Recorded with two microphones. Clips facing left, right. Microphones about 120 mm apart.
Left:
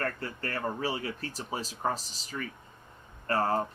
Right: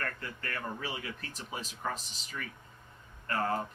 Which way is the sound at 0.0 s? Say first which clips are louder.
Left 5 dB; 35° left (ahead or behind).